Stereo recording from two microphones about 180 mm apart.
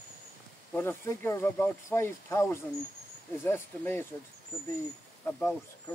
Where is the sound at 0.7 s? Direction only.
10° left (ahead or behind).